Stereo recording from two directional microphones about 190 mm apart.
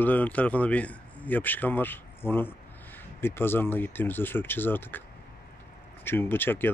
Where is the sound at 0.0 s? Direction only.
10° left (ahead or behind).